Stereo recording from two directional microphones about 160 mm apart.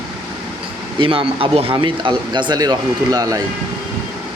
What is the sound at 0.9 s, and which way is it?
Speech, 35° right (ahead or behind).